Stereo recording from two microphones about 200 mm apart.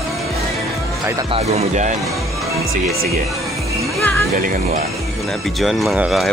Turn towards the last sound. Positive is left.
turn(degrees=0)  # may be behind; listen again after turning